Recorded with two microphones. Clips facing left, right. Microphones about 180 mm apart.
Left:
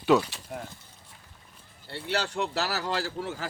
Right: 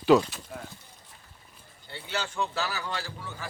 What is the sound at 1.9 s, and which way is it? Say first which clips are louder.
Speech: left 4 dB; 70° left (ahead or behind).